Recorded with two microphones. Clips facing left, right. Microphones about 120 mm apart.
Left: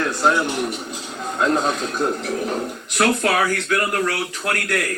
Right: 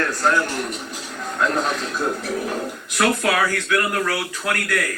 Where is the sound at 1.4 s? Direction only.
35° left (ahead or behind).